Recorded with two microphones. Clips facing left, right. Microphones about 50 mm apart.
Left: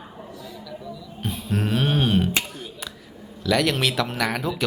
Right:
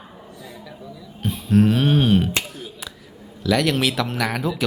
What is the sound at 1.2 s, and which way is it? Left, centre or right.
Speech, centre.